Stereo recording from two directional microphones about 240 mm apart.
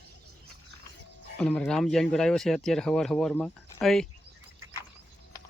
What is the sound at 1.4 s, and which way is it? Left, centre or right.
Speech, centre.